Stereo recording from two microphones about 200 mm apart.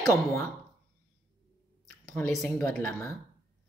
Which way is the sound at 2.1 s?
15° left (ahead or behind).